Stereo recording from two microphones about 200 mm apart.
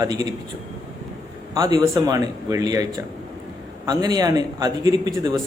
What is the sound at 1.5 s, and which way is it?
Speech, 20° right (ahead or behind).